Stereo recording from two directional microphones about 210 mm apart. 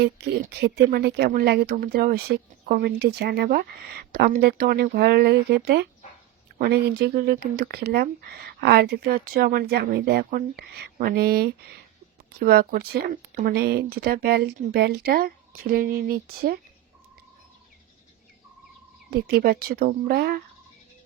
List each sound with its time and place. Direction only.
0.9 s speech: 50° right (ahead or behind)
19.3 s speech: 45° right (ahead or behind)